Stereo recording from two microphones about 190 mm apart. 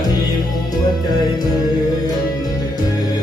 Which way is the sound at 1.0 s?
20° left (ahead or behind).